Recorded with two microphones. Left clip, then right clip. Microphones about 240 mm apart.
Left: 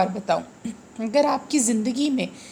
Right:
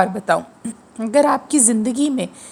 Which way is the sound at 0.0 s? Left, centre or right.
Right.